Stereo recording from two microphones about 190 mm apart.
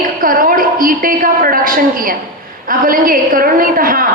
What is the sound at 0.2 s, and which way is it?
A woman's voice, 45° right (ahead or behind).